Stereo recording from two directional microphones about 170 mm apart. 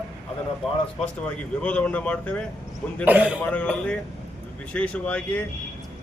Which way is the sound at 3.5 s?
5° left (ahead or behind).